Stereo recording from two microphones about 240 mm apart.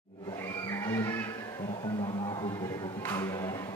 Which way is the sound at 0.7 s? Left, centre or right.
Centre.